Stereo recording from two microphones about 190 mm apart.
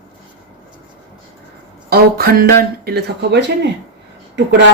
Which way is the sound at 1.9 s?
55° right (ahead or behind).